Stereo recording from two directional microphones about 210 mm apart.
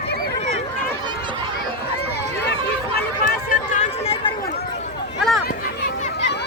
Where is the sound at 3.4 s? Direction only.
35° left (ahead or behind).